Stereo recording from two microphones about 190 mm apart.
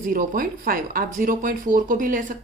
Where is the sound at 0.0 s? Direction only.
45° right (ahead or behind).